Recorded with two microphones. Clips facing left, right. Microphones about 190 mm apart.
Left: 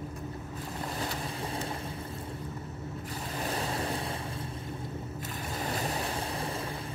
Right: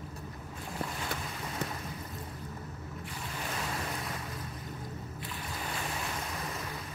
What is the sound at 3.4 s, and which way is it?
Boat, 35° left (ahead or behind).